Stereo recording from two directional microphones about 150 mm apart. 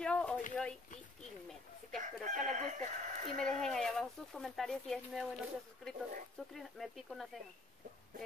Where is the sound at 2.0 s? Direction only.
55° right (ahead or behind).